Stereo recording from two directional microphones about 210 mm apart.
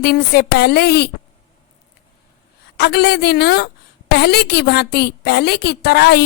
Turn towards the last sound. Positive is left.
turn(degrees=50)  # may be behind; listen again after turning